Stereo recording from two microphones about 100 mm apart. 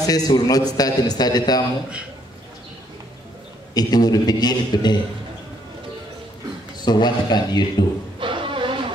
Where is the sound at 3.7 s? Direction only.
40° left (ahead or behind).